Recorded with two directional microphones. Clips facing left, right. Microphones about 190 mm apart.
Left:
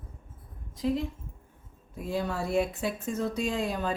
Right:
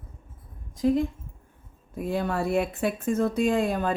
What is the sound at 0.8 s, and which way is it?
Speech, 50° right (ahead or behind).